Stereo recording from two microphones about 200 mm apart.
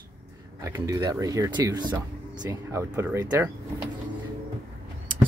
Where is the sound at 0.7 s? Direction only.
15° right (ahead or behind).